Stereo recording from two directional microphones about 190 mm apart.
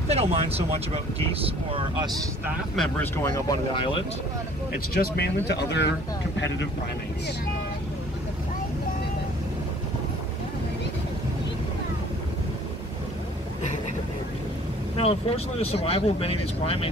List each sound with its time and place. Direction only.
0.1 s speech: 30° right (ahead or behind)
2.7 s speech: centre (ahead or behind)
3.3 s speech: 20° left (ahead or behind)
4.9 s speech: 55° left (ahead or behind)
15.0 s speech: 30° left (ahead or behind)